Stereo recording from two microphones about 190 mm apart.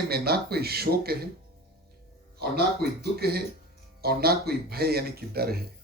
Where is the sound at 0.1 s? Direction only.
55° right (ahead or behind).